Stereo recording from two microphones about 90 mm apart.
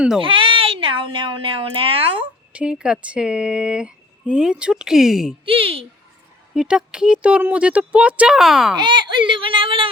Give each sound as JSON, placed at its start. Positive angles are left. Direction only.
{"t": 0.2, "sound": "a woman's voice", "side_deg": -75}
{"t": 2.5, "sound": "speech", "side_deg": -10}
{"t": 5.5, "sound": "speech", "side_deg": -90}
{"t": 6.5, "sound": "speech", "side_deg": -5}
{"t": 8.4, "sound": "a child's voice", "side_deg": 0}
{"t": 8.8, "sound": "speech", "side_deg": -60}